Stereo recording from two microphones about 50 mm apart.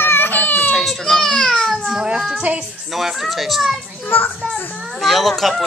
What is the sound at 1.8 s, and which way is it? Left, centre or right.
A child's voice, centre.